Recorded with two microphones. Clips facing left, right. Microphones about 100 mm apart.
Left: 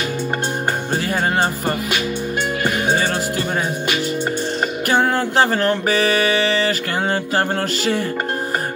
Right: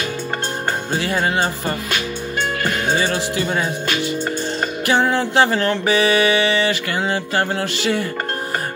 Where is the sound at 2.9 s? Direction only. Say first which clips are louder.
Even; 45° left (ahead or behind).